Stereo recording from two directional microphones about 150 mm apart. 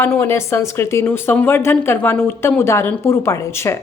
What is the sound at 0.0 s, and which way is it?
A woman's voice, 15° left (ahead or behind).